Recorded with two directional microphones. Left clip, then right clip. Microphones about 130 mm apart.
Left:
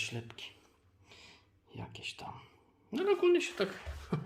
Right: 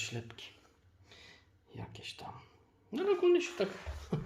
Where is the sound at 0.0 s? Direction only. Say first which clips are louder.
Left 2 dB; 20° left (ahead or behind).